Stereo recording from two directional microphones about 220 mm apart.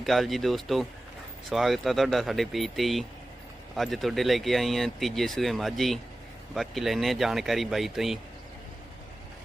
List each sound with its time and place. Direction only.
0.0 s speech: centre (ahead or behind)